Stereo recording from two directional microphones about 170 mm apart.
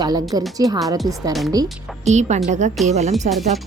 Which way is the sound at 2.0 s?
45° right (ahead or behind).